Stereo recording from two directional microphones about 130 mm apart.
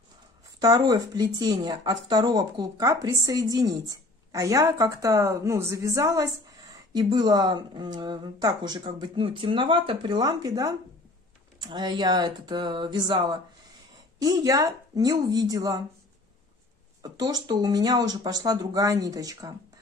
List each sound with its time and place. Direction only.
0.6 s speech: 30° right (ahead or behind)
17.0 s speech: 30° right (ahead or behind)